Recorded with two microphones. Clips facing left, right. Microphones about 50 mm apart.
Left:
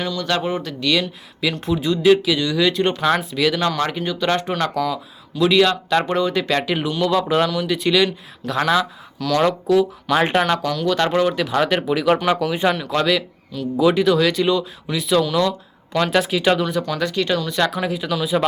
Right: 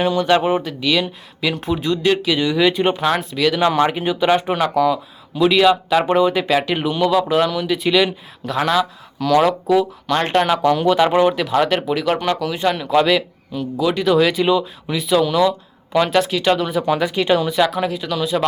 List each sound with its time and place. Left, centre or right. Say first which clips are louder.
0.0 s speech: right 6 dB; right; by 2.4 s centre
2.4 s speech: right 2 dB; centre
3.6 s speech: right 5 dB; right
10.6 s speech: right 5 dB; right
11.3 s speech: right 2 dB; centre
12.7 s speech: right 4 dB; centre
13.7 s speech: left 3 dB; centre
14.0 s speech: right 1 dB; centre
17.0 s speech: right 4 dB; centre
17.5 s speech: right 3 dB; centre